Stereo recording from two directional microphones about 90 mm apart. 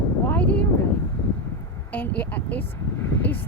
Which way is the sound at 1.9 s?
20° left (ahead or behind).